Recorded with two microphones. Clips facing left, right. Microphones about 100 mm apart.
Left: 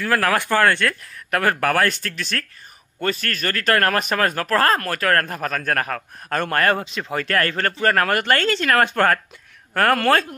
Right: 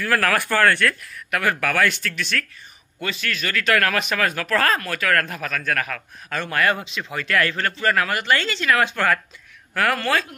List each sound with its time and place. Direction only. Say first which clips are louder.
0.0 s speech: left 1 dB; 20° left (ahead or behind)
1.4 s speech: left 2 dB; 40° left (ahead or behind)